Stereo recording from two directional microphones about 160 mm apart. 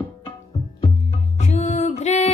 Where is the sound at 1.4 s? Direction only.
45° left (ahead or behind).